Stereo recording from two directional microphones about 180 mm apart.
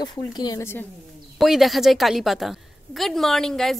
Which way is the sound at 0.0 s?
25° left (ahead or behind).